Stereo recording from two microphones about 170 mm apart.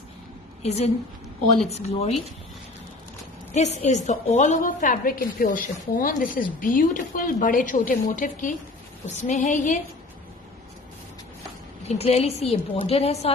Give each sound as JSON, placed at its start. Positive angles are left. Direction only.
{"t": 0.6, "sound": "a woman's voice", "side_deg": 40}
{"t": 3.5, "sound": "a woman's voice", "side_deg": 40}
{"t": 11.9, "sound": "a woman's voice", "side_deg": 35}